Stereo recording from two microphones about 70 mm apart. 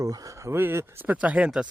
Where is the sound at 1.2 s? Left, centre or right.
Centre.